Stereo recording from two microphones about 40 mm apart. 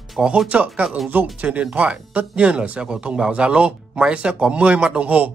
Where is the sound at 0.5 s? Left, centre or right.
Right.